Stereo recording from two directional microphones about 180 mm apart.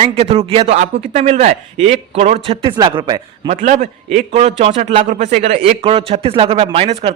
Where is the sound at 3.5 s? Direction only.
40° right (ahead or behind).